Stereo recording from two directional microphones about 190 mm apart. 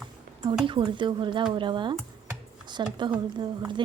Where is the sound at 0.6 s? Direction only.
25° right (ahead or behind).